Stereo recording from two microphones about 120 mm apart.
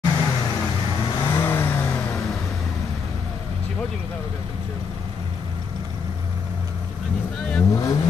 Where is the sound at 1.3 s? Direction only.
20° left (ahead or behind).